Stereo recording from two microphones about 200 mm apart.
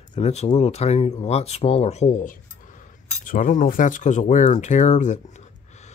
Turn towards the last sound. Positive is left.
turn(degrees=40)  # may be behind; listen again after turning